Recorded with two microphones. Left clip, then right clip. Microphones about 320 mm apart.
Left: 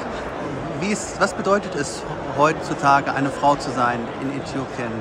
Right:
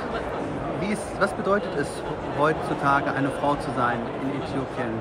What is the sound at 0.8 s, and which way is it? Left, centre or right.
Speech, centre.